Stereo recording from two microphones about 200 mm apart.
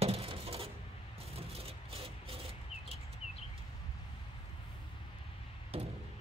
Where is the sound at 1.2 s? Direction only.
30° right (ahead or behind).